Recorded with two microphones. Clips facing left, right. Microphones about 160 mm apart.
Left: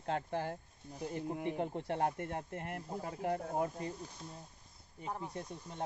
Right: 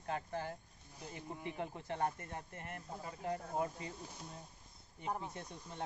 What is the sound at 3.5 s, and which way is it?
Speech, 50° left (ahead or behind).